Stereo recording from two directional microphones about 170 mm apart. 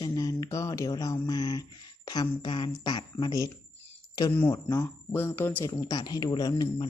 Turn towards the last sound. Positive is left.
turn(degrees=25)  # may be behind; listen again after turning